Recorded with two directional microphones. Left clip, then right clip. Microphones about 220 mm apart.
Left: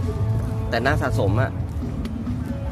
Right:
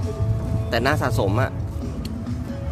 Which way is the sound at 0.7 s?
20° right (ahead or behind).